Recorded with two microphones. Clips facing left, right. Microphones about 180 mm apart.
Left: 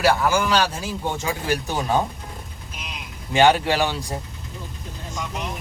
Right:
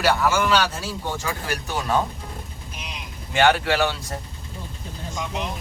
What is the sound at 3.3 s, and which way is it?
Speech, 15° left (ahead or behind).